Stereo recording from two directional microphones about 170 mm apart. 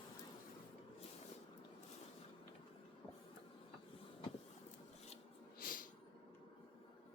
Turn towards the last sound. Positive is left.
turn(degrees=55)  # may be behind; listen again after turning